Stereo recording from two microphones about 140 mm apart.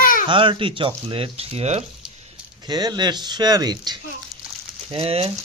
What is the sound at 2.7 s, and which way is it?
Speech, 30° right (ahead or behind).